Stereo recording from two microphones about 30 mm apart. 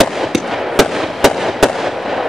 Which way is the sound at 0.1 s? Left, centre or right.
Centre.